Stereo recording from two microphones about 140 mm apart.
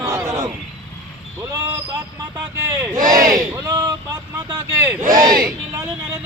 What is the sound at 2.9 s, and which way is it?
A man's voice, 25° right (ahead or behind).